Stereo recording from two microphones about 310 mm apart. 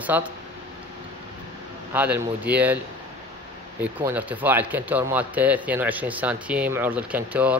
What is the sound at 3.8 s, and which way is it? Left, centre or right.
Speech, centre.